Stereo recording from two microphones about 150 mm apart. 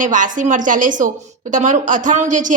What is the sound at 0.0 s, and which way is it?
A woman's voice, 60° right (ahead or behind).